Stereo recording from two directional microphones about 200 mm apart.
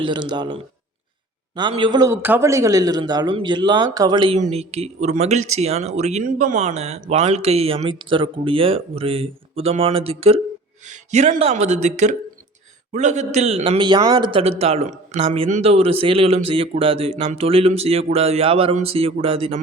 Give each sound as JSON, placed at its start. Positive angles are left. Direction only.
{"t": 0.0, "sound": "a man's voice", "side_deg": -25}
{"t": 4.4, "sound": "a man's voice", "side_deg": -35}